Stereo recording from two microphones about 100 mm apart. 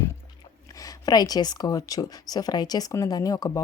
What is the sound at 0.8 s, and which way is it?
Speech, 40° left (ahead or behind).